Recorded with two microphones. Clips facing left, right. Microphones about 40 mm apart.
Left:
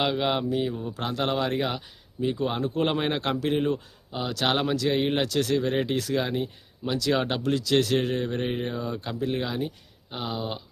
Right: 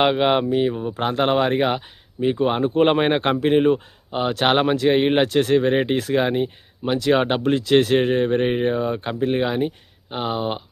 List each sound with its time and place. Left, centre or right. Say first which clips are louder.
0.0 s speech: right 7 dB; right